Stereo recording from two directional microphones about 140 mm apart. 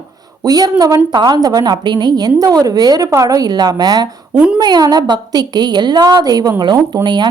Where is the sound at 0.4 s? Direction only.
25° right (ahead or behind).